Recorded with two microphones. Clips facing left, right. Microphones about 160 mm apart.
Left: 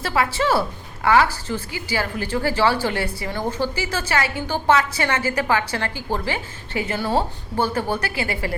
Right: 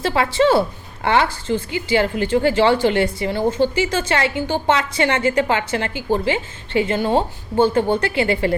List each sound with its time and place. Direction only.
0.0 s a woman's voice: 25° right (ahead or behind)